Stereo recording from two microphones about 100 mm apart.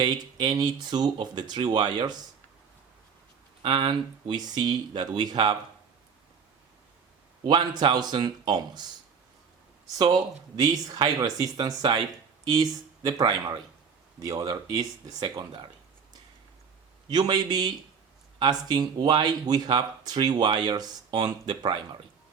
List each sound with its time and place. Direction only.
0.0 s speech: 45° right (ahead or behind)
3.6 s speech: 55° right (ahead or behind)
7.4 s speech: 45° right (ahead or behind)
17.1 s speech: 45° right (ahead or behind)